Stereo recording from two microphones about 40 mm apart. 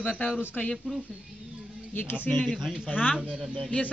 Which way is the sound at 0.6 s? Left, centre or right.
Left.